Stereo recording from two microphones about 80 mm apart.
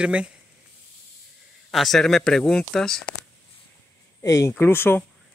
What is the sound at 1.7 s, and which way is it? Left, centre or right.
Speech, centre.